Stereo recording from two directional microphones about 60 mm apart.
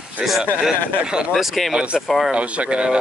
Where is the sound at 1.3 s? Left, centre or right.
Centre.